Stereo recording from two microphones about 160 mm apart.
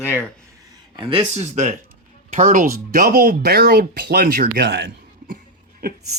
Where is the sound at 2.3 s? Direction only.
55° right (ahead or behind); by 4.9 s 90° right.